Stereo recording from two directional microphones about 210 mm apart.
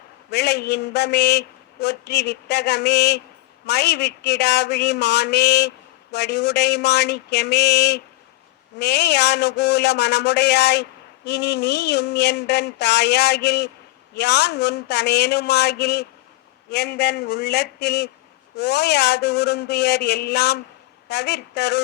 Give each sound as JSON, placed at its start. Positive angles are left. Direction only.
{"t": 0.3, "sound": "a man's voice", "side_deg": 50}